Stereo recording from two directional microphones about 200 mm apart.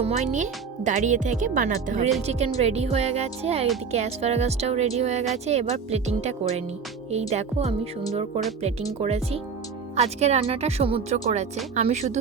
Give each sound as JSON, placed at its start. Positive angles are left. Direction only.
{"t": 0.0, "sound": "speech", "side_deg": -35}
{"t": 9.0, "sound": "speech", "side_deg": -30}